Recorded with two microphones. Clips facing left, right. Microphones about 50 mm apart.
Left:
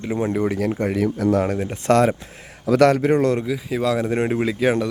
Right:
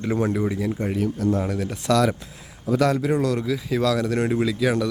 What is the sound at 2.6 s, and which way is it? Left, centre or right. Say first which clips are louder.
Speech: left 5 dB; left.